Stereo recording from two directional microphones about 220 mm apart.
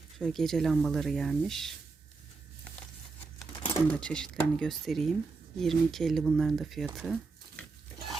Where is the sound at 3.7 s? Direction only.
5° left (ahead or behind).